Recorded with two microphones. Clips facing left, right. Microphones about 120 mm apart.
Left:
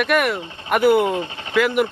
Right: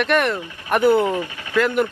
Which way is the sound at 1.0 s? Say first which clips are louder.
Even; 25° left (ahead or behind).